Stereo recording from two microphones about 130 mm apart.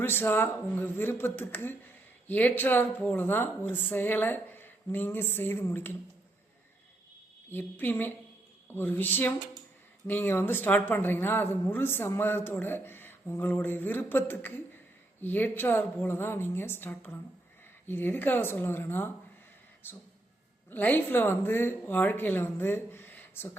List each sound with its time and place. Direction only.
0.0 s speech: 15° left (ahead or behind)
7.5 s speech: 15° left (ahead or behind)
20.7 s speech: 15° left (ahead or behind)